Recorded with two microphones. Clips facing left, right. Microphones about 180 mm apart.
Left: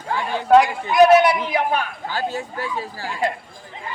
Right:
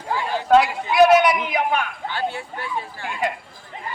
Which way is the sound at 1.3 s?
30° left (ahead or behind).